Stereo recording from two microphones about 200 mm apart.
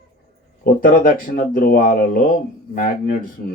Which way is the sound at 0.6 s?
45° left (ahead or behind).